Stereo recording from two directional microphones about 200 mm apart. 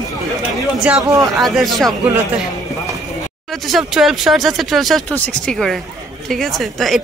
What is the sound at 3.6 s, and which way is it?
A woman's voice, centre (ahead or behind).